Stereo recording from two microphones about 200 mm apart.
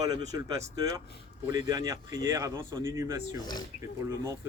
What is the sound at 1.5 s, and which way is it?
Speech, 20° right (ahead or behind).